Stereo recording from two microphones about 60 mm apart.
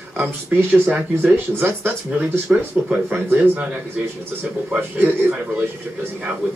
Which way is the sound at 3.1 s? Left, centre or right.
Right.